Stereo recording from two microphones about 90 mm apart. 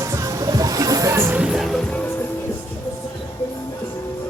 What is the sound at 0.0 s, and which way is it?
Music, 35° right (ahead or behind).